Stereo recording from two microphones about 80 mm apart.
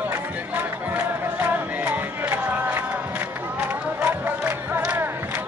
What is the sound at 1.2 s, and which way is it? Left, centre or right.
Music, right.